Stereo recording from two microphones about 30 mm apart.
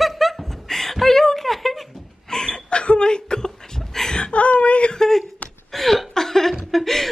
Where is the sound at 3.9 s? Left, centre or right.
Centre.